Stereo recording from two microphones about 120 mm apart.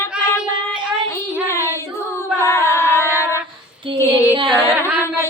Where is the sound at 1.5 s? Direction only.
20° left (ahead or behind).